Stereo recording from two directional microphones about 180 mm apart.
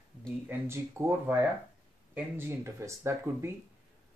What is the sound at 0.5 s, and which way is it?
Speech, 15° right (ahead or behind).